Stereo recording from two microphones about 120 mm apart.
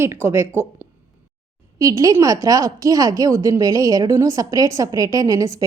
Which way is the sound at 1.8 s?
30° right (ahead or behind).